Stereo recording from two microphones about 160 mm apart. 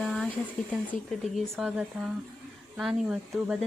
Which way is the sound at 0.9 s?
50° left (ahead or behind).